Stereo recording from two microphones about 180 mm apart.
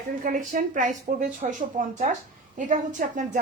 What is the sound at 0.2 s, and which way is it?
A woman's voice, 45° right (ahead or behind).